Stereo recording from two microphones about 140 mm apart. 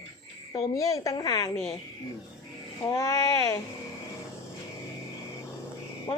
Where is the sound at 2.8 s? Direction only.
25° left (ahead or behind).